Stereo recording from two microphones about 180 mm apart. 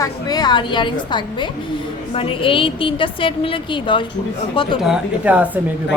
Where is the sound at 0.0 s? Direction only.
20° left (ahead or behind).